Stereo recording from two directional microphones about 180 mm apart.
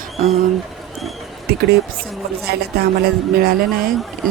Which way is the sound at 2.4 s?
60° right (ahead or behind).